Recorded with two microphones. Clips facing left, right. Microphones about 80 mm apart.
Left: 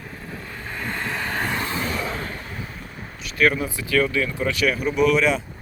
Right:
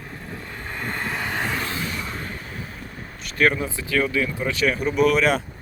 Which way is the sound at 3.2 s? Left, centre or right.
Right.